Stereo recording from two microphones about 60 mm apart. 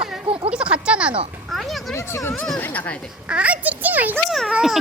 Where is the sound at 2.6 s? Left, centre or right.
Left.